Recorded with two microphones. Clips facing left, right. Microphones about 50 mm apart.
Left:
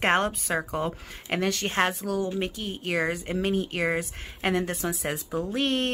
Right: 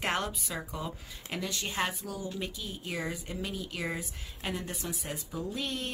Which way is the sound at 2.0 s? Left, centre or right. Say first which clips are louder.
Left 10 dB; left.